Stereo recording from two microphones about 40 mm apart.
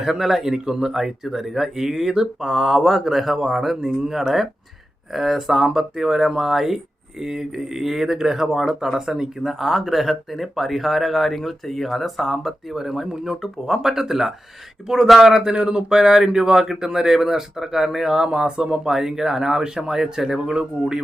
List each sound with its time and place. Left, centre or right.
0.0 s speech: centre
3.8 s speech: right
4.1 s speech: centre
18.3 s speech: right